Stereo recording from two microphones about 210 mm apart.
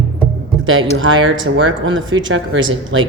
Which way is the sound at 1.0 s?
65° right (ahead or behind).